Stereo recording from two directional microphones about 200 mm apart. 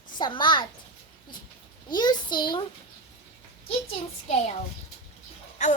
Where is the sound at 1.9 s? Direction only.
20° left (ahead or behind).